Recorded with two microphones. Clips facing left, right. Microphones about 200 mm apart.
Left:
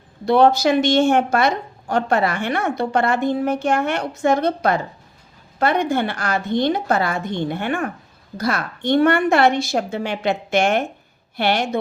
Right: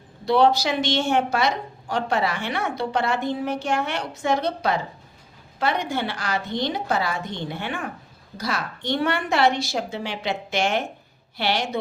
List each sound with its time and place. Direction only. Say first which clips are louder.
0.3 s a woman's voice: left 4 dB; 50° left (ahead or behind)